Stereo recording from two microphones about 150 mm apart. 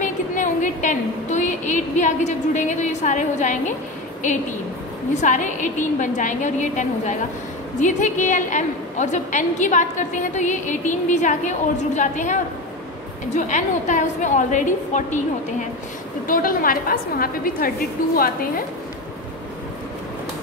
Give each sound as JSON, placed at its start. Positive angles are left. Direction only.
{"t": 0.0, "sound": "a woman's voice", "side_deg": 55}
{"t": 5.2, "sound": "a woman's voice", "side_deg": 55}
{"t": 16.3, "sound": "a woman's voice", "side_deg": 70}